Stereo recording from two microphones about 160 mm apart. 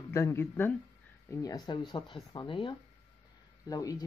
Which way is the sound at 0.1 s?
15° left (ahead or behind).